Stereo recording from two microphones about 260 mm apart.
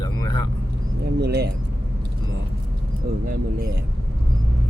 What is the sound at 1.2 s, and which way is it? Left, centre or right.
Speech, right.